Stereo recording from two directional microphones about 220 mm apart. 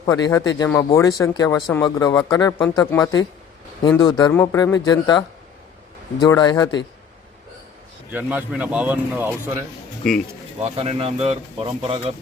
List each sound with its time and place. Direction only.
0.0 s speech: 15° left (ahead or behind)
8.1 s speech: 5° right (ahead or behind)
10.6 s speech: 30° right (ahead or behind)